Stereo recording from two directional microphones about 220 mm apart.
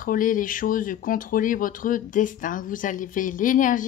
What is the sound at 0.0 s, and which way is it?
Speech, 40° left (ahead or behind).